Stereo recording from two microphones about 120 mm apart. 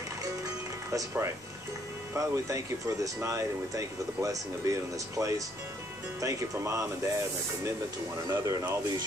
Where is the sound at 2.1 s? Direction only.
25° right (ahead or behind).